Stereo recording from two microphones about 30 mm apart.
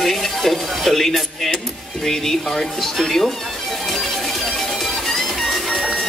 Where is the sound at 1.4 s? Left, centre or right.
Centre.